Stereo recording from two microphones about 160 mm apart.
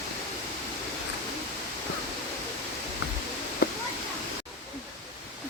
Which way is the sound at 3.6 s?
80° left.